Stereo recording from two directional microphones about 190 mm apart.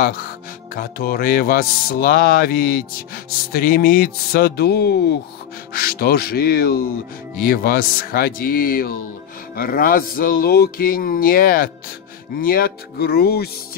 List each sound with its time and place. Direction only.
0.0 s speech: 50° left (ahead or behind)